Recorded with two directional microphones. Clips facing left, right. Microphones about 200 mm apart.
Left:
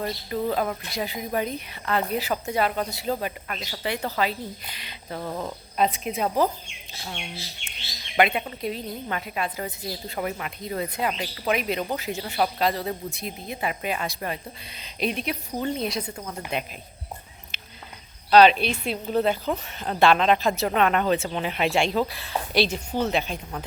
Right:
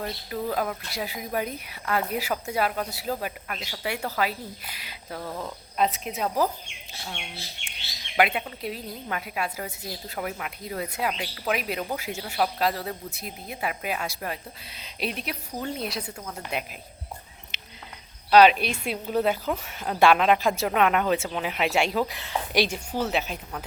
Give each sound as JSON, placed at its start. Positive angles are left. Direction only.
{"t": 0.0, "sound": "a woman's voice", "side_deg": 0}
{"t": 5.3, "sound": "speech", "side_deg": 15}
{"t": 5.7, "sound": "a woman's voice", "side_deg": 0}
{"t": 16.1, "sound": "speech", "side_deg": 5}
{"t": 17.5, "sound": "a sound", "side_deg": -20}
{"t": 18.3, "sound": "a woman's voice", "side_deg": -10}